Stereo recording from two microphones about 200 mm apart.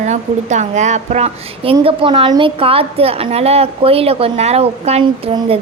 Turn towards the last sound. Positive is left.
turn(degrees=-25)  # may be behind; listen again after turning